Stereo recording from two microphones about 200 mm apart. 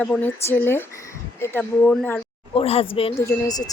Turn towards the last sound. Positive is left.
turn(degrees=15)  # may be behind; listen again after turning